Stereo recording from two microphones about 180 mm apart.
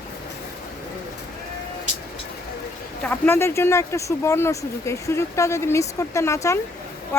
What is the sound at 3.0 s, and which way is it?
Speech, 10° left (ahead or behind).